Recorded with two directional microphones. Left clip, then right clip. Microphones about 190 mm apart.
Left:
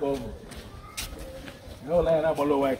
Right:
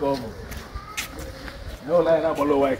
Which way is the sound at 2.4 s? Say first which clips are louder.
Right 4 dB; 55° left (ahead or behind).